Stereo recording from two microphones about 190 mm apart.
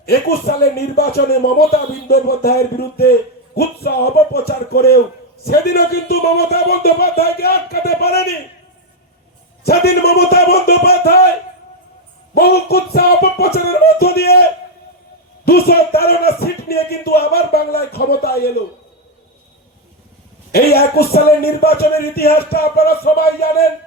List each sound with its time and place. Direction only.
0.0 s speech: 55° left (ahead or behind)
9.6 s speech: 55° left (ahead or behind)
12.3 s speech: 55° left (ahead or behind)
15.4 s speech: 55° left (ahead or behind)
20.5 s speech: 55° left (ahead or behind)